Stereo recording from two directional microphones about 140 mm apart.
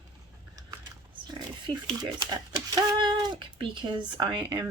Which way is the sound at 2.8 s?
35° right (ahead or behind).